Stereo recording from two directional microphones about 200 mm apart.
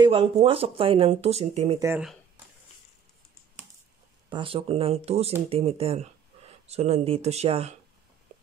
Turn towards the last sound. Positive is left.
turn(degrees=-30)  # may be behind; listen again after turning